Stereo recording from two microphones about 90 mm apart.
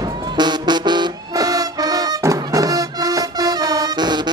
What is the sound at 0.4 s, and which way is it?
Music, 55° right (ahead or behind).